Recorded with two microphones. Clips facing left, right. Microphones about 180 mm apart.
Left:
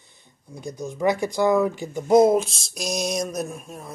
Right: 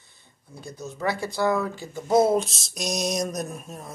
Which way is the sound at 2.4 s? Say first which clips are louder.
Left 1 dB; centre (ahead or behind).